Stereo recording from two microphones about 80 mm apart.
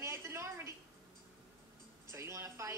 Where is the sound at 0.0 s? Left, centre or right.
Right.